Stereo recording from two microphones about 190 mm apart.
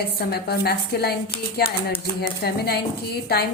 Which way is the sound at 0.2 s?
55° left (ahead or behind).